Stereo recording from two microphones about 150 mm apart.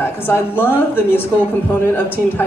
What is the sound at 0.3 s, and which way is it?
Speech, 15° left (ahead or behind).